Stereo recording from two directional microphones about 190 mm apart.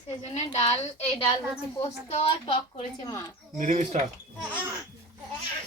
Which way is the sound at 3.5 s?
40° right (ahead or behind).